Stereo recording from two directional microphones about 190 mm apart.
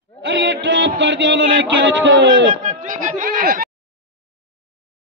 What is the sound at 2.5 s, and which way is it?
Speech, 40° right (ahead or behind).